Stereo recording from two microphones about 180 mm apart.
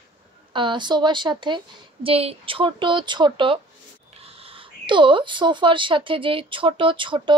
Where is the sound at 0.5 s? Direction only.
25° right (ahead or behind).